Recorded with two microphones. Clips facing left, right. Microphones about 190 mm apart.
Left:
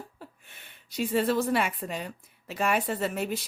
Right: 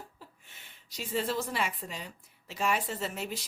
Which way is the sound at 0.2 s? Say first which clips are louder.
Left 6 dB; 60° left (ahead or behind).